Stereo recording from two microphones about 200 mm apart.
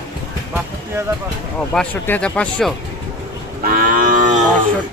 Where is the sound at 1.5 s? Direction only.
5° left (ahead or behind).